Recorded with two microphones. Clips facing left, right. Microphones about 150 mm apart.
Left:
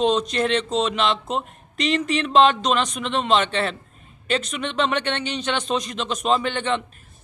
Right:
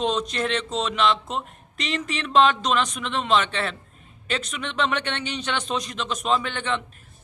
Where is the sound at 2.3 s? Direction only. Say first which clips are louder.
Left 2 dB; 25° left (ahead or behind).